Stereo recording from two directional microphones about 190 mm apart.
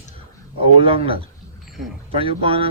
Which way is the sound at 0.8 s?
30° right (ahead or behind).